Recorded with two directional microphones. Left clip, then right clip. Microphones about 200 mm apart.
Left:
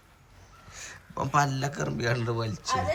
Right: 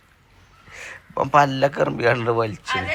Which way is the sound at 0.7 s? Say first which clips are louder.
Right 7 dB; centre (ahead or behind).